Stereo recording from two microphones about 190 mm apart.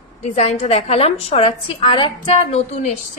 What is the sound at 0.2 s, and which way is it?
A woman's voice, 35° left (ahead or behind).